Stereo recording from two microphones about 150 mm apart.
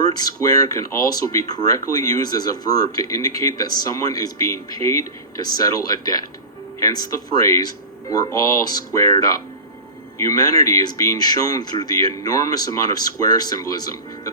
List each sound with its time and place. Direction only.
0.2 s speech: 25° left (ahead or behind)